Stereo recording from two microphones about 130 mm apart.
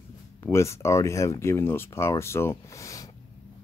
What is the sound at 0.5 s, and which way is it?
Speech, 20° left (ahead or behind).